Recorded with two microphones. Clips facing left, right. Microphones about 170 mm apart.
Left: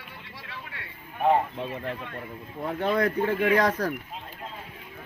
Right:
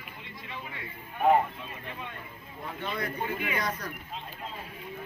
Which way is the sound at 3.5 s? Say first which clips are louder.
Left 10 dB; 90° left.